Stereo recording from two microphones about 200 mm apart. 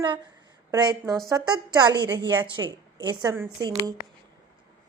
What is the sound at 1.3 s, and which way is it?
A woman's voice, 20° right (ahead or behind).